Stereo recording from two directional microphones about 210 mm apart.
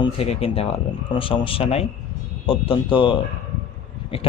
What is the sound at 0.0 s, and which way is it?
Speech, 30° left (ahead or behind).